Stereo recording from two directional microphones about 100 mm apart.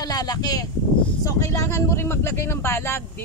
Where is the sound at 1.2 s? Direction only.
30° left (ahead or behind).